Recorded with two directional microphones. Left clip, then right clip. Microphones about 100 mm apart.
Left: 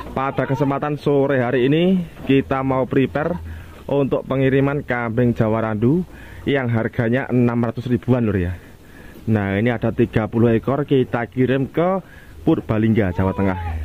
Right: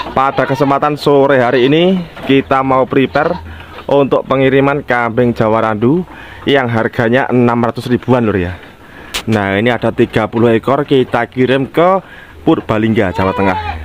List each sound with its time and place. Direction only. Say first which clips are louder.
0.1 s speech: right 9 dB; 20° right (ahead or behind)